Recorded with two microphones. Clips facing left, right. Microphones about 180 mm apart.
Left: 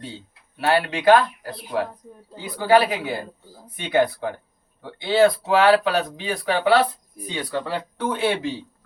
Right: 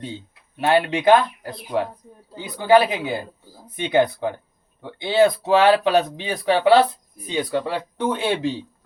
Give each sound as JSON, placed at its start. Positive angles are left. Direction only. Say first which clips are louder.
{"t": 0.6, "sound": "speech", "louder": "right 2 dB", "side_deg": -20}